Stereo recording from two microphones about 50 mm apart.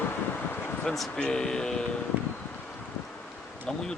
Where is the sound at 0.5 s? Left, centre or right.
Left.